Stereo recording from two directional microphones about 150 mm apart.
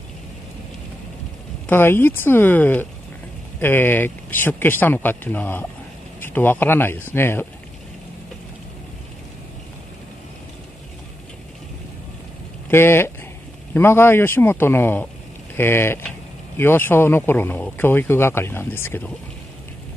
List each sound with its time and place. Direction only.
1.7 s speech: 15° left (ahead or behind)
12.6 s speech: 15° left (ahead or behind)